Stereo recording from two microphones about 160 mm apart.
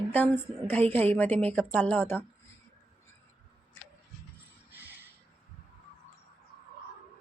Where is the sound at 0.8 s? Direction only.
40° right (ahead or behind).